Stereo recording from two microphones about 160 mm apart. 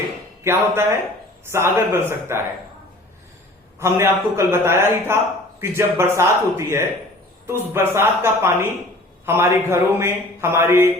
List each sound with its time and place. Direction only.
0.4 s a man's voice: 15° right (ahead or behind)
3.8 s a man's voice: 15° right (ahead or behind)